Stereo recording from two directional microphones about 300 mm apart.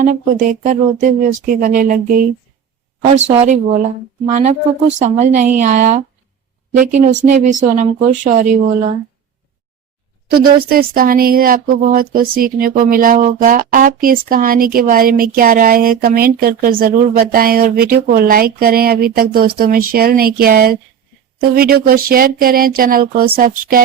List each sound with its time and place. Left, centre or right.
0.6 s speech: right
10.2 s speech: right